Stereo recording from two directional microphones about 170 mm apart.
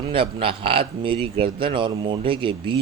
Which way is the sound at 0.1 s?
30° right (ahead or behind).